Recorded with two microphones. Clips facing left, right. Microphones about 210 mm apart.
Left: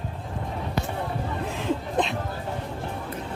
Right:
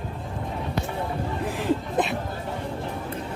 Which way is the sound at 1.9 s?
5° right (ahead or behind).